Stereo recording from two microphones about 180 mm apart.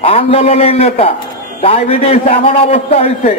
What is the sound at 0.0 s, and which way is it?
A man's voice, 35° left (ahead or behind).